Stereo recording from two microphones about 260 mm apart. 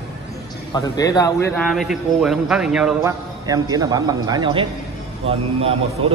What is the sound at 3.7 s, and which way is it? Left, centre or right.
A man's voice, centre.